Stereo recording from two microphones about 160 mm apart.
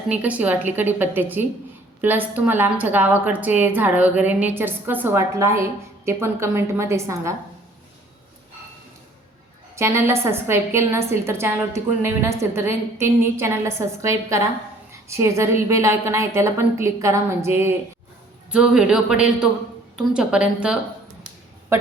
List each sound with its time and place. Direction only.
0.1 s a woman's voice: 10° right (ahead or behind)
9.7 s a woman's voice: 15° right (ahead or behind)
18.5 s speech: 5° right (ahead or behind)